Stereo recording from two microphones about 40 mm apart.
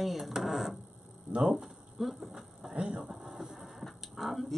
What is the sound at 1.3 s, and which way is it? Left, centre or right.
Speech, centre.